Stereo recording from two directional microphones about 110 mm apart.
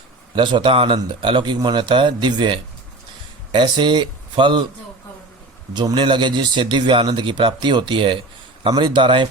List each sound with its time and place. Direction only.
0.3 s speech: 45° right (ahead or behind)
5.7 s speech: 45° right (ahead or behind)